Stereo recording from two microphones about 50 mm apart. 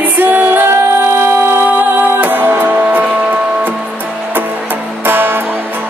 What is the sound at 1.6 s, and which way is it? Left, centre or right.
Music, right.